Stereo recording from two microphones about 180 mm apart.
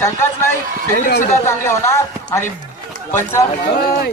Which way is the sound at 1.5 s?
15° left (ahead or behind).